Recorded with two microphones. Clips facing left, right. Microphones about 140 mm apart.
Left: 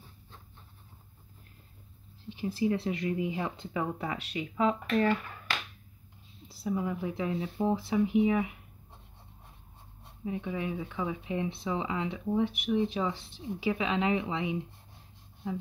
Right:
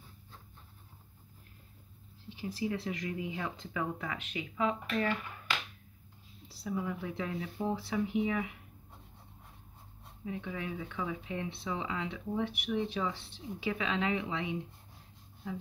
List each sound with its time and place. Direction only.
2.7 s speech: 25° left (ahead or behind)
6.6 s speech: 20° left (ahead or behind)
10.2 s speech: 25° left (ahead or behind)